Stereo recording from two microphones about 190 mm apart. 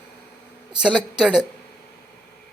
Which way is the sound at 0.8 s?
5° right (ahead or behind).